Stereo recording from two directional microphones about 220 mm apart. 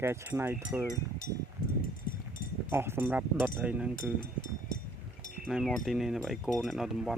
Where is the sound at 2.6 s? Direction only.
10° right (ahead or behind).